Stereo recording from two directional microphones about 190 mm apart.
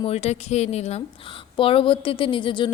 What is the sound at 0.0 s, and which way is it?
A woman's voice, 35° left (ahead or behind).